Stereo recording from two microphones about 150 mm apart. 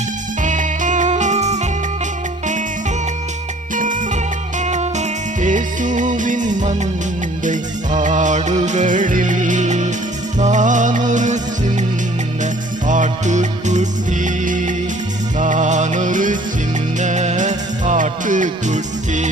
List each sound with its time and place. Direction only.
0.4 s music: 55° right (ahead or behind)
4.6 s music: 50° right (ahead or behind)
12.9 s music: 55° right (ahead or behind)